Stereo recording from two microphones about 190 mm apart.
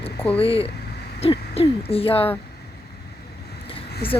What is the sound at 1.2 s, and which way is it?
Speech, 30° left (ahead or behind).